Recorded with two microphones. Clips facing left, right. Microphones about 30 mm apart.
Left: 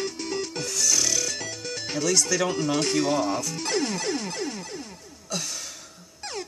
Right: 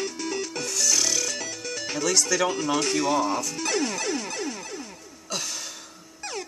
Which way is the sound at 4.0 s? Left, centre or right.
Left.